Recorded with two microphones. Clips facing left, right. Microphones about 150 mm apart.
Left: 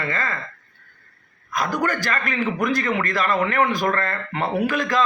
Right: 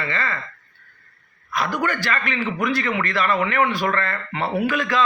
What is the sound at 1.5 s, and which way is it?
A man's voice, 40° left (ahead or behind).